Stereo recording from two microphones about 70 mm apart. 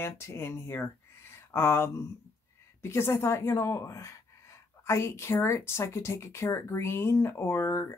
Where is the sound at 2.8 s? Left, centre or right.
Left.